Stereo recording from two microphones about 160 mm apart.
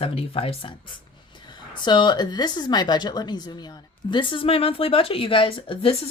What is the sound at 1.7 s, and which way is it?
A woman's voice, 30° left (ahead or behind).